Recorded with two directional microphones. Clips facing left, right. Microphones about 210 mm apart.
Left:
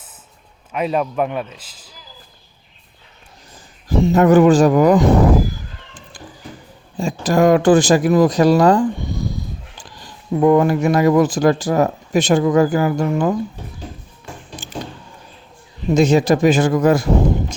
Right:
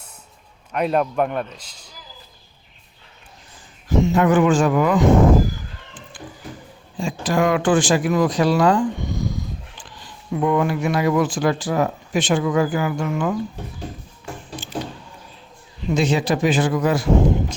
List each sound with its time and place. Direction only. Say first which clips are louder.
0.7 s a man's voice: even; centre (ahead or behind)
3.8 s speech: left 4 dB; 35° left (ahead or behind)
6.9 s speech: left 4 dB; 40° left (ahead or behind)
15.9 s speech: left 6 dB; 45° left (ahead or behind)